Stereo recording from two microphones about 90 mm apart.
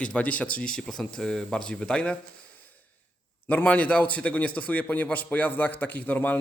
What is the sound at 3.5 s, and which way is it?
A man's voice, 20° left (ahead or behind).